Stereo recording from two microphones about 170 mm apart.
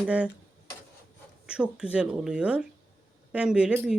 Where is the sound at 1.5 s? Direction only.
5° right (ahead or behind).